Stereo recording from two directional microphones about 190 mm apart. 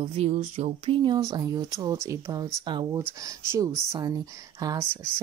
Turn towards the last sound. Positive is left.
turn(degrees=-15)  # may be behind; listen again after turning